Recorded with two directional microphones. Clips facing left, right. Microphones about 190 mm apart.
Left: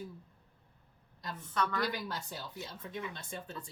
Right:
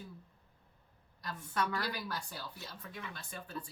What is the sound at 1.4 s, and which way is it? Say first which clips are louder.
Speech: left 1 dB; 10° right (ahead or behind).